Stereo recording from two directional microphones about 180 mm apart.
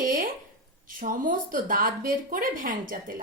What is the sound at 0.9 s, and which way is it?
A woman's voice, 45° right (ahead or behind).